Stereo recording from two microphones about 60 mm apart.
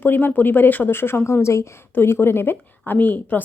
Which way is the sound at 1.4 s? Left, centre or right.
Left.